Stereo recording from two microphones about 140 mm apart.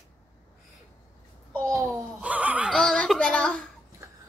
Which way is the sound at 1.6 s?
20° right (ahead or behind).